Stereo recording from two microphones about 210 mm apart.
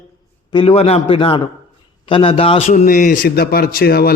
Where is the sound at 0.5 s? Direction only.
25° left (ahead or behind).